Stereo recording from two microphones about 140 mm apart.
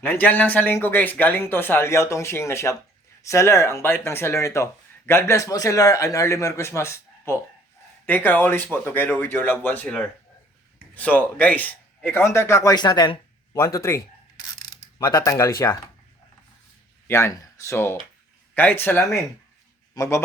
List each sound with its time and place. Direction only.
0.0 s a man's voice: 10° left (ahead or behind)
14.3 s mechanisms: 25° left (ahead or behind)
17.1 s speech: 20° left (ahead or behind)